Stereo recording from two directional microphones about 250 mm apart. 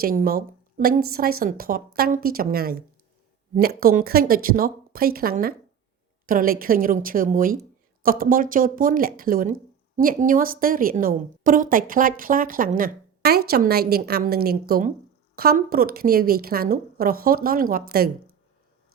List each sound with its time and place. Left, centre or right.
0.0 s speech: right